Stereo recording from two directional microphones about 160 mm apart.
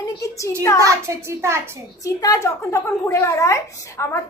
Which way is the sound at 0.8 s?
15° right (ahead or behind).